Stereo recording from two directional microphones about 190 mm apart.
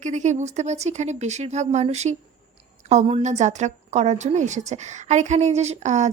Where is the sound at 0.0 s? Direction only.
40° right (ahead or behind).